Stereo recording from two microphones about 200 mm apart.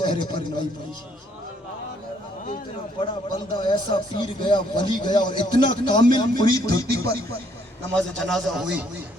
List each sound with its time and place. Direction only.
0.0 s speech: 25° left (ahead or behind)
3.0 s speech: 25° left (ahead or behind)
7.9 s a man's voice: 5° left (ahead or behind)